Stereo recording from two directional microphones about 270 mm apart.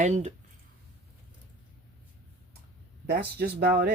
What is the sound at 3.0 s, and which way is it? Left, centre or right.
Speech, right.